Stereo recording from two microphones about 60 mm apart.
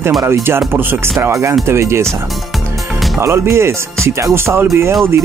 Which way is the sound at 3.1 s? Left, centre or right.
Right.